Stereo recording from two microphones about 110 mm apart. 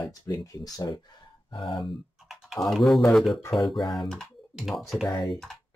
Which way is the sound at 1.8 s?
Centre (ahead or behind).